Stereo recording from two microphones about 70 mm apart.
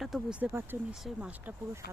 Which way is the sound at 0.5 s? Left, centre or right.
Right.